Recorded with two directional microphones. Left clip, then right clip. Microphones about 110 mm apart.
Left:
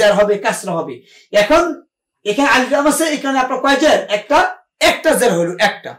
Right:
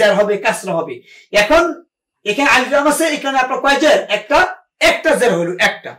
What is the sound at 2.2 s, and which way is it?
Speech, 15° left (ahead or behind).